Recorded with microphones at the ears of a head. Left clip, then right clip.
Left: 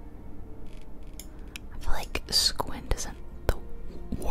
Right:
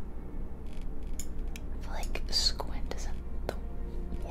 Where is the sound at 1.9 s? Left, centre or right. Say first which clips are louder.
Left 6 dB; left.